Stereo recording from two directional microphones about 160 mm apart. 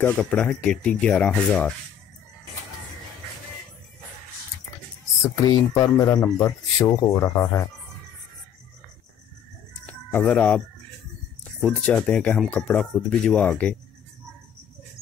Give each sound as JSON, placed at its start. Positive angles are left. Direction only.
{"t": 0.0, "sound": "speech", "side_deg": 10}
{"t": 5.4, "sound": "speech", "side_deg": 20}
{"t": 9.8, "sound": "a sound", "side_deg": 10}
{"t": 11.6, "sound": "speech", "side_deg": 5}